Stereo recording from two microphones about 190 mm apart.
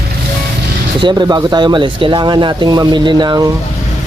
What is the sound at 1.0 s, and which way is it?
Speech, 20° right (ahead or behind).